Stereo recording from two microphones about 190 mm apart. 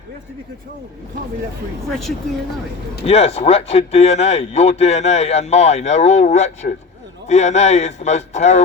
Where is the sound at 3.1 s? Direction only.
30° left (ahead or behind).